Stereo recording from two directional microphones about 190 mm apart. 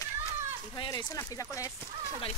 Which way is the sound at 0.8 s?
20° left (ahead or behind).